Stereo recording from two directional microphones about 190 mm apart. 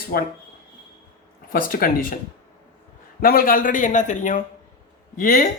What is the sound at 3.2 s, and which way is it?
A man's voice, 50° left (ahead or behind).